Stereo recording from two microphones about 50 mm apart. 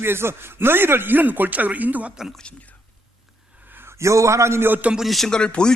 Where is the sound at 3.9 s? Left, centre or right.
Right.